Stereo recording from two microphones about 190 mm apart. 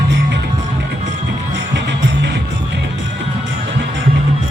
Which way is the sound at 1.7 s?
65° right (ahead or behind).